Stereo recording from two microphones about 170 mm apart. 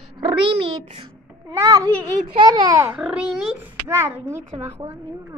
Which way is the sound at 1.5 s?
20° right (ahead or behind).